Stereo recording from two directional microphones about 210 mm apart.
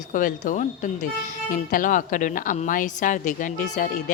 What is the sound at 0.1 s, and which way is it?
Speech, 40° left (ahead or behind).